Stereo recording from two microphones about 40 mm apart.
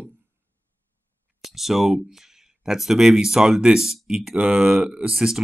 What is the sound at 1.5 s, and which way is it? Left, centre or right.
Speech, centre.